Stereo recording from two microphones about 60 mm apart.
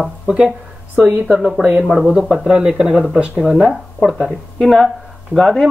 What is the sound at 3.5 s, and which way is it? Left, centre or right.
Speech, centre.